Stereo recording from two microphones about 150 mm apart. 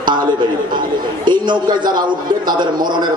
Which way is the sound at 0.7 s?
30° right (ahead or behind).